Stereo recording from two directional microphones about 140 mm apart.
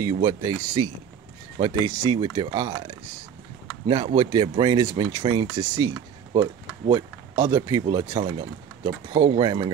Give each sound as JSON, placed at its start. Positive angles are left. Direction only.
{"t": 0.0, "sound": "speech", "side_deg": -35}